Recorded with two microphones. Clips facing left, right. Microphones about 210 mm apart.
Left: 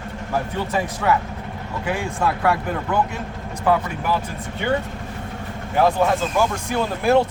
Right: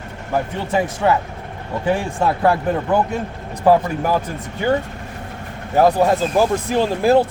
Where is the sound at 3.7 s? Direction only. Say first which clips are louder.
Right 5 dB; 40° right (ahead or behind).